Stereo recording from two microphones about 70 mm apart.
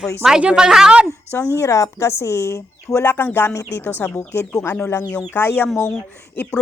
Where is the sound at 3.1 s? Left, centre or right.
Left.